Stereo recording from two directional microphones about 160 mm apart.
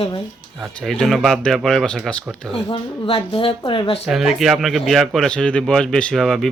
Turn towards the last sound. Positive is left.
turn(degrees=0)  # may be behind; listen again after turning